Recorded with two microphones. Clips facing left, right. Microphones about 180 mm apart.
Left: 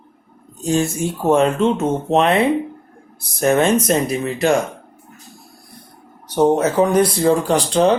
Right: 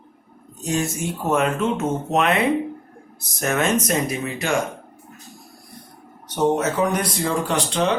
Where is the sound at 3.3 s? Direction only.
30° left (ahead or behind).